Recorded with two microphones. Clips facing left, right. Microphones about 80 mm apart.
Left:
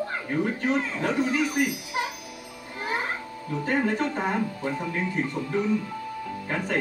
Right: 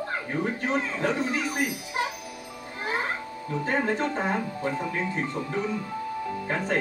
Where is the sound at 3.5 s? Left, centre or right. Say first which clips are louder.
Left 1 dB; right.